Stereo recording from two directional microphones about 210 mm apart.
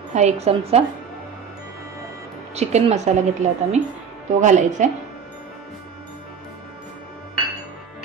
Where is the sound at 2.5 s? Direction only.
30° right (ahead or behind).